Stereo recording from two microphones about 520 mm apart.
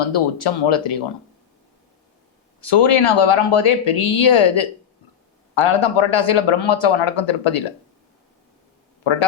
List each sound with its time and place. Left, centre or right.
0.0 s speech: left
2.6 s speech: left
5.5 s speech: left